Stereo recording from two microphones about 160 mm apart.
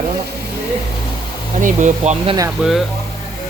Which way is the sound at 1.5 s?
50° right (ahead or behind).